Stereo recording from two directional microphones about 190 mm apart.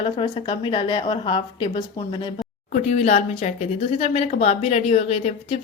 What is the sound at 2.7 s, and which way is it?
Speech, 35° left (ahead or behind).